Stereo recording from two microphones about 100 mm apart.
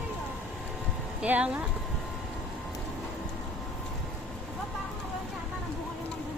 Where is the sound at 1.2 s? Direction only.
15° right (ahead or behind).